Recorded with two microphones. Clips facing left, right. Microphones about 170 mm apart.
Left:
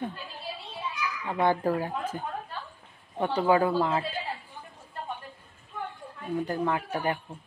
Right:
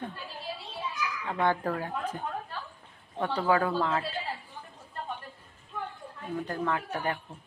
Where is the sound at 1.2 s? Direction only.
10° left (ahead or behind).